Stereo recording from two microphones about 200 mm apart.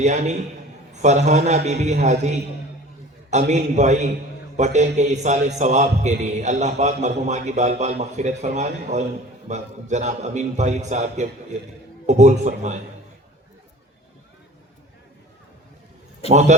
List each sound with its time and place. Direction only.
0.0 s a man's voice: 35° right (ahead or behind)
16.3 s a man's voice: 35° right (ahead or behind)